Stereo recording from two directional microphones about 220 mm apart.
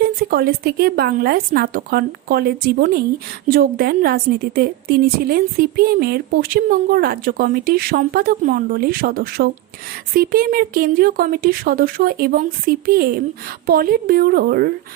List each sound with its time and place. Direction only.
0.0 s a woman's voice: 45° right (ahead or behind)